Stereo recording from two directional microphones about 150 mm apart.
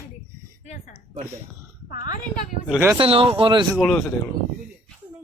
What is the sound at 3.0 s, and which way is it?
Speech, 40° right (ahead or behind).